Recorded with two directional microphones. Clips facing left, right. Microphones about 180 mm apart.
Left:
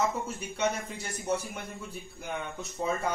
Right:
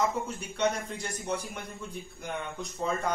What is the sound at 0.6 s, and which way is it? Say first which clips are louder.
Speech: right 2 dB; 5° left (ahead or behind).